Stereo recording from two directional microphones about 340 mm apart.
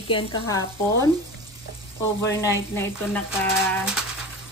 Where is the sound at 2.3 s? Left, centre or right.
Centre.